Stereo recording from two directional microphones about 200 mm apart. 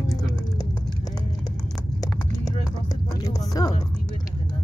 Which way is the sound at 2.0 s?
20° left (ahead or behind).